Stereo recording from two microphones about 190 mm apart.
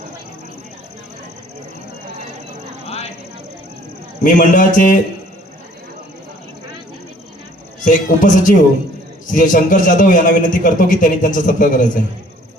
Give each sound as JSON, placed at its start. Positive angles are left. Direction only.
{"t": 4.2, "sound": "a man's voice", "side_deg": 45}
{"t": 7.9, "sound": "a man's voice", "side_deg": 45}